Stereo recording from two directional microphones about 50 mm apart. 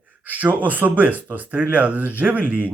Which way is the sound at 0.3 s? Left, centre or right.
Right.